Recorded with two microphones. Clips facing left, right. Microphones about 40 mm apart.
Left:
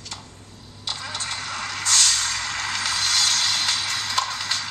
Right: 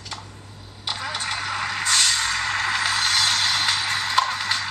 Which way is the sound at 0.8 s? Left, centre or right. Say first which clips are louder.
Right 3 dB; centre.